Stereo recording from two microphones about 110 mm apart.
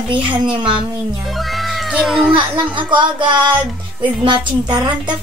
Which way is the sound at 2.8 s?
45° right (ahead or behind).